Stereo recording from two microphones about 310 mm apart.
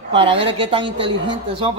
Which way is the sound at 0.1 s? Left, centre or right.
Centre.